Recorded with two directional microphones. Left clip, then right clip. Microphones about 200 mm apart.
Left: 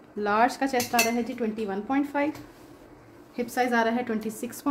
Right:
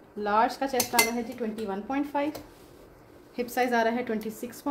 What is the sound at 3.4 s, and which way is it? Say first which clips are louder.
Speech: left 1 dB; 5° right (ahead or behind).